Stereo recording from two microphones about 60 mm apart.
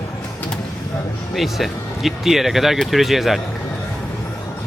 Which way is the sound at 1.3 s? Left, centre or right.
Centre.